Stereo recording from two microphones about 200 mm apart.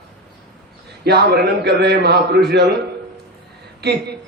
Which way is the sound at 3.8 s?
55° right (ahead or behind).